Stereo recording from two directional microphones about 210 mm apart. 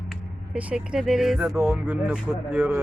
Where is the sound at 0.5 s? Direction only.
5° right (ahead or behind).